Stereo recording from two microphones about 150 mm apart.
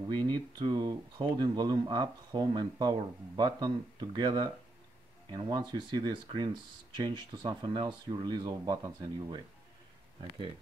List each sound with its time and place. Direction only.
0.1 s speech: 30° right (ahead or behind)